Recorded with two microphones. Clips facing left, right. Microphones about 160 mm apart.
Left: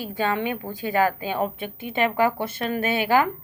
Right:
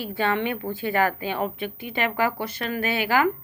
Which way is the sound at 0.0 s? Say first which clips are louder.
Even; 15° left (ahead or behind).